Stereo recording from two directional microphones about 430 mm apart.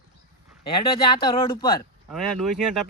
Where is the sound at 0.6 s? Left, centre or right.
Centre.